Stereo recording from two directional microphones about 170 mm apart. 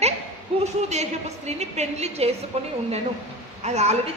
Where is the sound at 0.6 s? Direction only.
40° right (ahead or behind).